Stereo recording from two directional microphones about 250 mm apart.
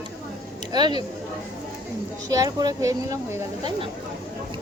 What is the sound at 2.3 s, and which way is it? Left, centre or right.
Speech, centre.